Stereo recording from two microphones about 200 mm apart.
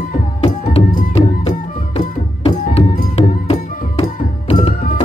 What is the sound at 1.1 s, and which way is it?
Music, 30° left (ahead or behind).